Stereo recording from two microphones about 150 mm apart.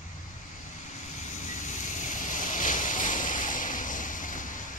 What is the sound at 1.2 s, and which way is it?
Waves, 55° left (ahead or behind).